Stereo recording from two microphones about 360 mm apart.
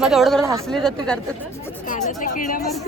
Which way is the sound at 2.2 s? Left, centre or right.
Left.